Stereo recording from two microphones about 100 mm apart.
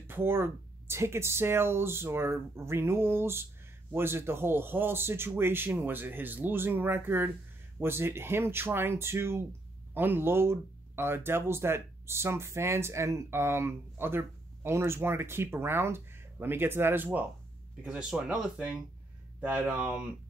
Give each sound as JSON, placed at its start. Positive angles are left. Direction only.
{"t": 0.0, "sound": "speech", "side_deg": -25}
{"t": 17.8, "sound": "speech", "side_deg": -10}